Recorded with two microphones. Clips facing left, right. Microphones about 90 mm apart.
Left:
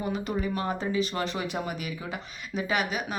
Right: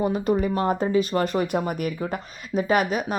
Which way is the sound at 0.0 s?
40° right (ahead or behind).